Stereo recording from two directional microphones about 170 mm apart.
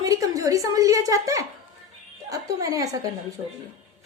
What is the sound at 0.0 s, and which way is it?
A woman's voice, 20° right (ahead or behind).